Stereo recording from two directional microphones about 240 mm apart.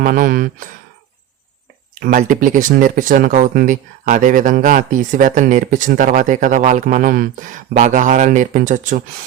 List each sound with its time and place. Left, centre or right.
0.0 s speech: right
2.0 s speech: right